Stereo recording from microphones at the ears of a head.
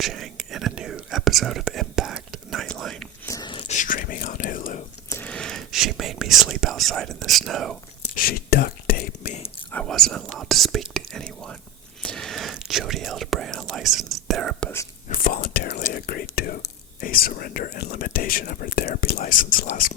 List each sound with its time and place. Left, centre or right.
0.0 s whispering: right
3.6 s whispering: left
5.0 s speech: right
8.1 s whispering: left
9.8 s whispering: right
15.1 s whispering: left